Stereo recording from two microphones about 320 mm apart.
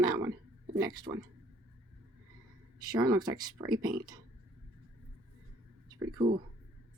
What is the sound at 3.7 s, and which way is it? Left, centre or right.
Speech, right.